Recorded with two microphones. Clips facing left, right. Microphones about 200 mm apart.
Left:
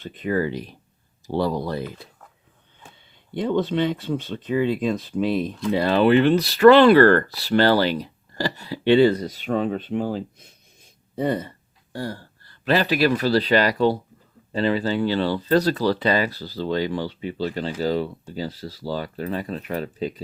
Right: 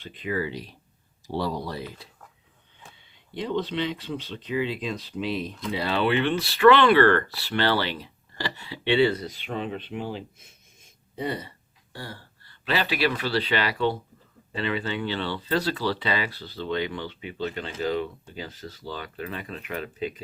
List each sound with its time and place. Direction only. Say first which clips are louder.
0.0 s speech: left 6 dB; 45° left (ahead or behind)
3.3 s speech: left 6 dB; 50° left (ahead or behind)